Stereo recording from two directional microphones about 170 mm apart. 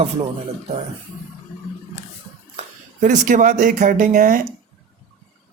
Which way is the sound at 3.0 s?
50° right (ahead or behind).